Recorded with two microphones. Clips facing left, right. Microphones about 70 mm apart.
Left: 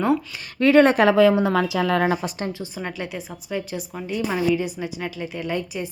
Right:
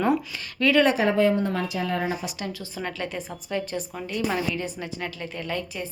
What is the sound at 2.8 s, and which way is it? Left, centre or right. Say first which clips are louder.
A woman's voice: right 1 dB; centre.